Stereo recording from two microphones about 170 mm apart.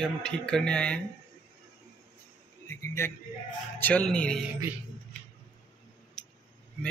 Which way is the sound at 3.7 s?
10° left (ahead or behind).